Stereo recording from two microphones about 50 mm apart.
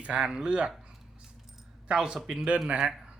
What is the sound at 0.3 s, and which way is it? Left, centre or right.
Speech, centre.